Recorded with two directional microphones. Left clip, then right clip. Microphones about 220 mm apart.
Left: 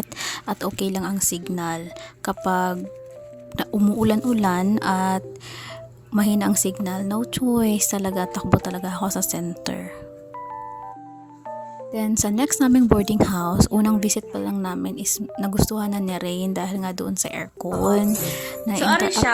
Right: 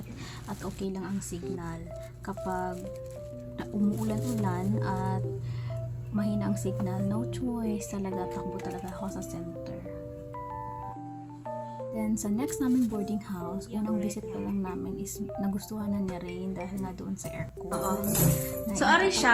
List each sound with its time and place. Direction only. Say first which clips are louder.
0.2 s a woman's voice: left 15 dB; 50° left (ahead or behind)
11.9 s a woman's voice: left 11 dB; 45° left (ahead or behind)
18.8 s speech: left 4 dB; 15° left (ahead or behind)